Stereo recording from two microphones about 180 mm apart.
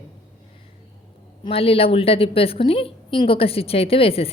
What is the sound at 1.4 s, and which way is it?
A woman's voice, 30° left (ahead or behind).